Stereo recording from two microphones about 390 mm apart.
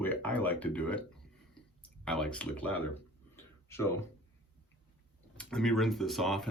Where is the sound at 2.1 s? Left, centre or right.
Centre.